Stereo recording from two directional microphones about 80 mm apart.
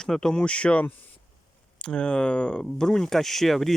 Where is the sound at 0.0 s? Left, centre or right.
Centre.